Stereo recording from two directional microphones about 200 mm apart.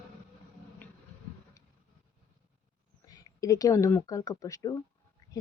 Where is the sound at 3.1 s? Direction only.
15° left (ahead or behind).